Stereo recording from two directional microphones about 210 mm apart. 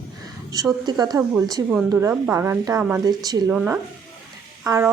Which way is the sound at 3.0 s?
20° right (ahead or behind).